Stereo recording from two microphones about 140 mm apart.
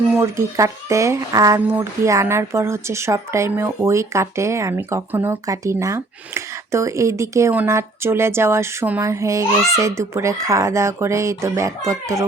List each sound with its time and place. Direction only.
0.1 s speech: 20° right (ahead or behind)